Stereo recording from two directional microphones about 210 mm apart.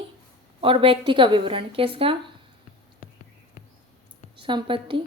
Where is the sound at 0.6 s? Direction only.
25° right (ahead or behind).